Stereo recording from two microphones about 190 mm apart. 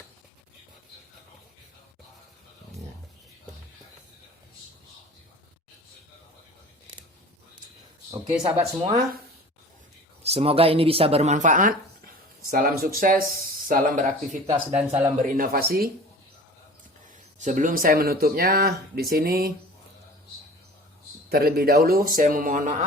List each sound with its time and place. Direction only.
8.4 s speech: 35° right (ahead or behind)
10.2 s speech: 30° right (ahead or behind)
15.2 s speech: 50° right (ahead or behind)
17.4 s speech: 40° right (ahead or behind)
21.2 s speech: 55° right (ahead or behind)